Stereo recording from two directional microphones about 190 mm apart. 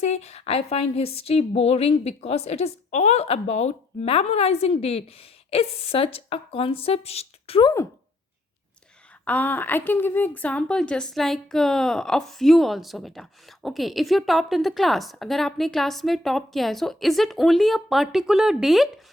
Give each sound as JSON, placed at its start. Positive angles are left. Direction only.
{"t": 0.0, "sound": "a woman's voice", "side_deg": 35}
{"t": 9.2, "sound": "a woman's voice", "side_deg": 10}